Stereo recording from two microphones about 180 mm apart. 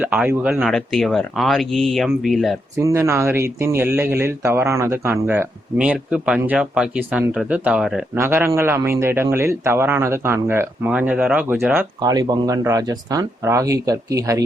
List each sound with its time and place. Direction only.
0.0 s speech: 5° right (ahead or behind)
0.6 s speech: centre (ahead or behind)
2.7 s speech: 15° right (ahead or behind)